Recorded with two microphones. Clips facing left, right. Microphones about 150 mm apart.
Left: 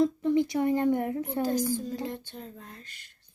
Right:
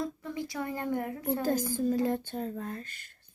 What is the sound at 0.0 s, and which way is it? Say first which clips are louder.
A woman's voice: left 11 dB; 25° left (ahead or behind).